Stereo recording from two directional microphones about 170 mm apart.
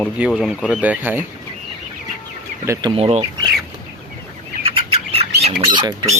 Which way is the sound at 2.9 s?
35° right (ahead or behind).